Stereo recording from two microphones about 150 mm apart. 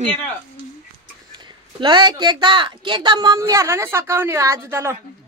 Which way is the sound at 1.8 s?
30° right (ahead or behind).